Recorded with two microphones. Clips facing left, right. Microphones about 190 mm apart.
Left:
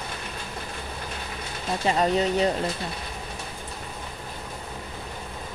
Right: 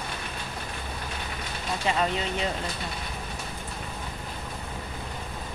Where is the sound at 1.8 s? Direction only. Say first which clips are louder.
Left 5 dB; 35° left (ahead or behind).